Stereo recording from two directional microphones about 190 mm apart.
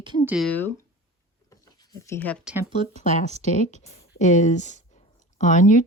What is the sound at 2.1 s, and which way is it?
Speech, 10° left (ahead or behind).